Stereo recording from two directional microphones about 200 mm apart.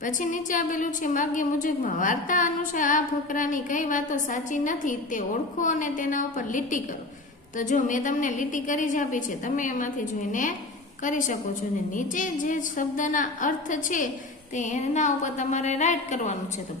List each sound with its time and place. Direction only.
0.0 s a woman's voice: 40° left (ahead or behind)
11.0 s a woman's voice: 40° left (ahead or behind)